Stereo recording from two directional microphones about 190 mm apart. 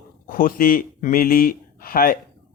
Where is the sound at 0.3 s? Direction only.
45° left (ahead or behind).